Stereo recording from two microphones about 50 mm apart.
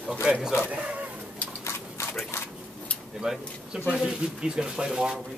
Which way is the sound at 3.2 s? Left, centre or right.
Centre.